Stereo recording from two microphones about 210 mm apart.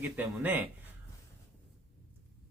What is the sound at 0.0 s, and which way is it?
Speech, 10° right (ahead or behind).